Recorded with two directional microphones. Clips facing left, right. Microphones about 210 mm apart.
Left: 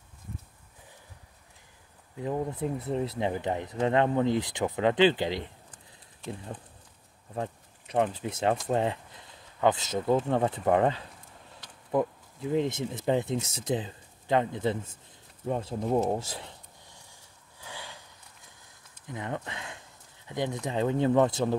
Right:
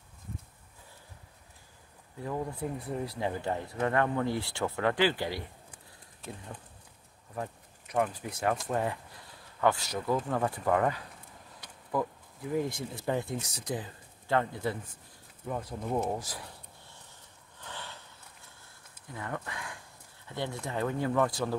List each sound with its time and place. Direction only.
2.1 s speech: 20° left (ahead or behind)
7.3 s speech: 25° left (ahead or behind)
15.4 s a sound: 25° left (ahead or behind); by 18.0 s 10° left (ahead or behind)
19.0 s speech: 20° left (ahead or behind)